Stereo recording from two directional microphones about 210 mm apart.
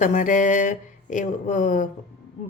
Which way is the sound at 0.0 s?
35° left (ahead or behind).